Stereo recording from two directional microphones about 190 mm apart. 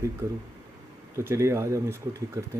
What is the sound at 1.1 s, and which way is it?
Speech, 15° right (ahead or behind).